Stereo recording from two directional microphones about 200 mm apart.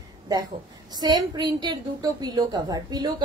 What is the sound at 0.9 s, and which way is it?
A woman's voice, 20° right (ahead or behind).